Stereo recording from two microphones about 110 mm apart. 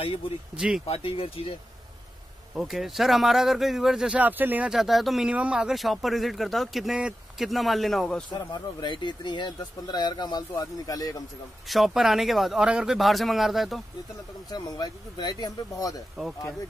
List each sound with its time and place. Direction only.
0.6 s speech: 5° right (ahead or behind)
0.8 s speech: 60° left (ahead or behind)
2.5 s speech: centre (ahead or behind)
4.7 s speech: centre (ahead or behind)
8.3 s speech: 40° left (ahead or behind)
11.6 s speech: centre (ahead or behind)
14.5 s speech: 35° left (ahead or behind)